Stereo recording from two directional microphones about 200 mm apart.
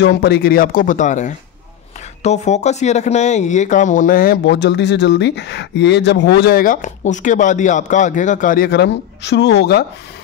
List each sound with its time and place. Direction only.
0.0 s speech: 55° left (ahead or behind)